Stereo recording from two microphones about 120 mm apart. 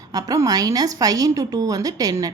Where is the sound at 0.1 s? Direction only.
30° right (ahead or behind).